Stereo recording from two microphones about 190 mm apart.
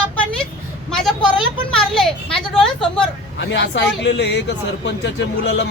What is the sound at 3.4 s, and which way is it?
A man's voice, 65° left (ahead or behind).